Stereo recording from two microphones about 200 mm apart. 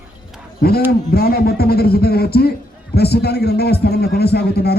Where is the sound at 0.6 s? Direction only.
50° left (ahead or behind).